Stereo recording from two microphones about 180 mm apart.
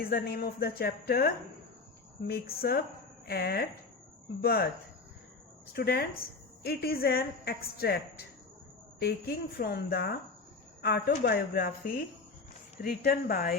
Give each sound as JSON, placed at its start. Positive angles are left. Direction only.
{"t": 0.0, "sound": "a woman's voice", "side_deg": 55}
{"t": 5.7, "sound": "a woman's voice", "side_deg": 60}